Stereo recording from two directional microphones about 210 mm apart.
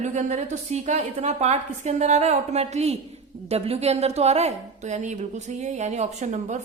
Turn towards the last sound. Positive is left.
turn(degrees=-35)  # may be behind; listen again after turning